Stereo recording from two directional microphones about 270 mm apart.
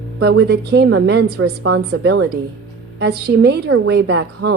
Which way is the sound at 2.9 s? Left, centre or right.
Right.